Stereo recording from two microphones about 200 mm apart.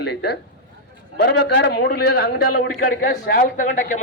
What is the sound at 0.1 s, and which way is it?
A man's voice, 55° left (ahead or behind).